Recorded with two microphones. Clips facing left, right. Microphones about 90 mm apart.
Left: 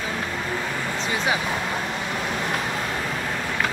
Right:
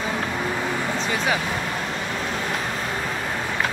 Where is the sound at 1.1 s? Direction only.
15° left (ahead or behind).